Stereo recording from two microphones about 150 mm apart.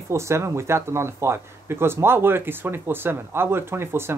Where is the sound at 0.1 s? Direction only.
20° right (ahead or behind).